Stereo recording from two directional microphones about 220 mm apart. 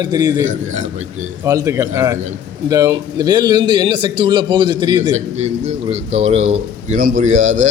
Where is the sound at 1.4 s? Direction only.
15° right (ahead or behind); by 7.4 s 35° right (ahead or behind).